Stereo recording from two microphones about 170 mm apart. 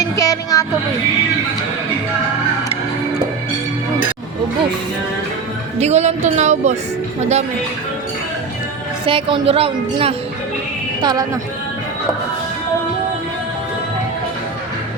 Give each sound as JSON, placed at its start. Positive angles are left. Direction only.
{"t": 0.0, "sound": "speech", "side_deg": 20}
{"t": 5.8, "sound": "a woman's voice", "side_deg": -40}
{"t": 9.0, "sound": "a woman's voice", "side_deg": -30}
{"t": 11.0, "sound": "speech", "side_deg": -20}